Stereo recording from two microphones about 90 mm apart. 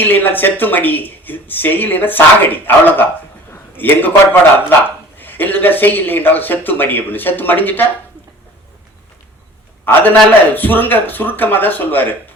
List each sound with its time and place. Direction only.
0.0 s speech: 20° left (ahead or behind)
9.8 s speech: 20° left (ahead or behind)